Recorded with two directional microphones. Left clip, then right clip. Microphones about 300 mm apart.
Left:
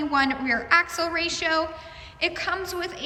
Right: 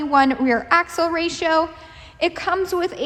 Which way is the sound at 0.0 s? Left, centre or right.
Centre.